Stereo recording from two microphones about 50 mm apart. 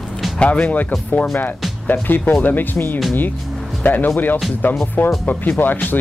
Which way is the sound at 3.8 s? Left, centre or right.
Left.